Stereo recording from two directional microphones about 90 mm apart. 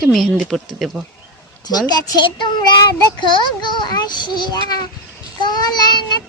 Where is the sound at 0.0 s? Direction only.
5° left (ahead or behind).